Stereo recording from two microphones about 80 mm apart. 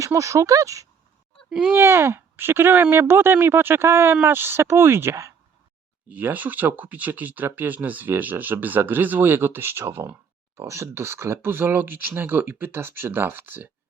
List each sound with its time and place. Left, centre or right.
0.0 s speech: right
1.5 s speech: centre
1.7 s speech: right
6.1 s speech: right